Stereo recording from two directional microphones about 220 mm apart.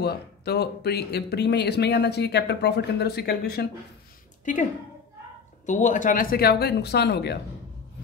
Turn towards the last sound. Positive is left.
turn(degrees=50)  # may be behind; listen again after turning